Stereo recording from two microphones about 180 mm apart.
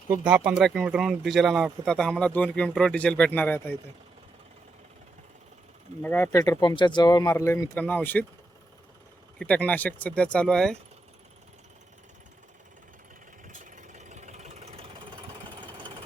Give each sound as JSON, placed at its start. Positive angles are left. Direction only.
{"t": 0.3, "sound": "speech", "side_deg": -10}
{"t": 6.0, "sound": "speech", "side_deg": 10}
{"t": 9.4, "sound": "speech", "side_deg": 10}
{"t": 13.5, "sound": "engine", "side_deg": -45}